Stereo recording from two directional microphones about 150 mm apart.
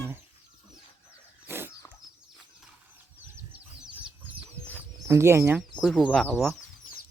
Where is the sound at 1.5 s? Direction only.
15° right (ahead or behind).